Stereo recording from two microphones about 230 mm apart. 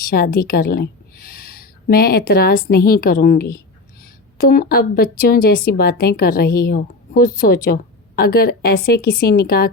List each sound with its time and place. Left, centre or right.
0.0 s a woman's voice: left